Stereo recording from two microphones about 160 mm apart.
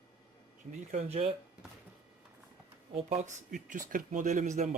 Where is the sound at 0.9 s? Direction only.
40° right (ahead or behind).